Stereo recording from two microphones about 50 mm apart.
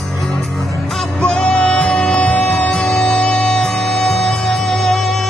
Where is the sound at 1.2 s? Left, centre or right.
Centre.